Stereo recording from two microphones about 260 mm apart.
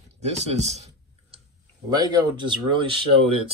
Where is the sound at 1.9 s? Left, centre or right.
Centre.